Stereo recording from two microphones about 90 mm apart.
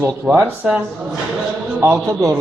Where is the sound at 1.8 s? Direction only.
35° right (ahead or behind).